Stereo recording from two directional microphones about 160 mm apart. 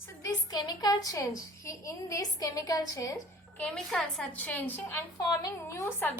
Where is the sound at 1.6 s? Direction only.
20° left (ahead or behind).